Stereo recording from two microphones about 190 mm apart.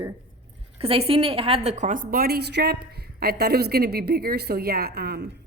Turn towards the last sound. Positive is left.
turn(degrees=-55)  # may be behind; listen again after turning